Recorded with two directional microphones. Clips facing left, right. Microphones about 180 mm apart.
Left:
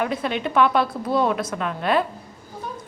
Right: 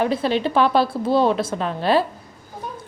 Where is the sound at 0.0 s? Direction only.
30° right (ahead or behind).